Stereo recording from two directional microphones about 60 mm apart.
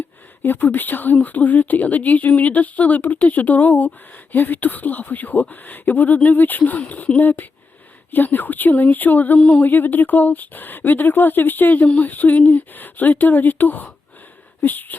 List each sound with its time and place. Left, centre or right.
0.4 s speech: left